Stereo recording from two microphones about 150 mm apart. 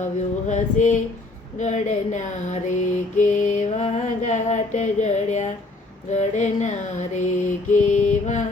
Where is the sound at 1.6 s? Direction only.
50° left (ahead or behind).